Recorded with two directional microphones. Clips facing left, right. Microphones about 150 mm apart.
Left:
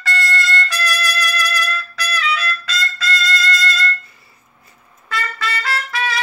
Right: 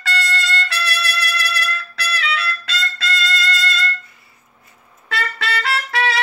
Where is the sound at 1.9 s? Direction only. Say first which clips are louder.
Left 2 dB; 70° right (ahead or behind).